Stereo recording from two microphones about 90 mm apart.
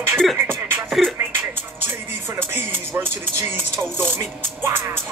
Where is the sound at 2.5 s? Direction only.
25° right (ahead or behind).